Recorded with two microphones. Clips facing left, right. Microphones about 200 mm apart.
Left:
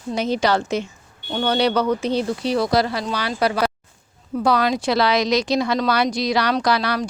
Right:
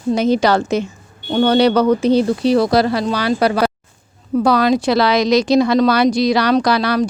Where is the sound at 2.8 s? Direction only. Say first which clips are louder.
Right 7 dB; 70° right (ahead or behind).